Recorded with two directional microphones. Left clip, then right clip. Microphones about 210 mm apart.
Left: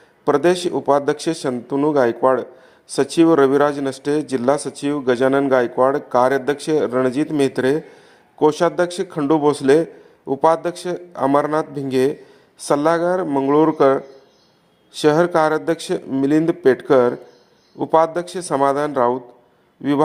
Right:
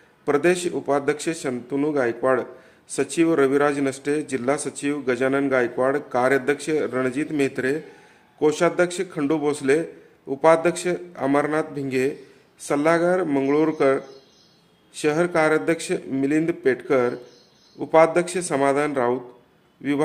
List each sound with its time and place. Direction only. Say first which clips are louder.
0.3 s speech: left 4 dB; 20° left (ahead or behind)
15.0 s speech: left 5 dB; 20° left (ahead or behind)